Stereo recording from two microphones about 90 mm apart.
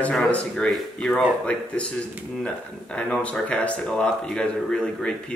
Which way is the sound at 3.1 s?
15° left (ahead or behind).